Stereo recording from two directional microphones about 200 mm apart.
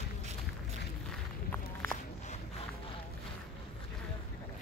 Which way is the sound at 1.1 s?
10° left (ahead or behind).